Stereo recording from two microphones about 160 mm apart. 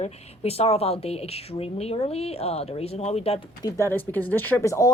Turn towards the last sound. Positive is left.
turn(degrees=20)  # may be behind; listen again after turning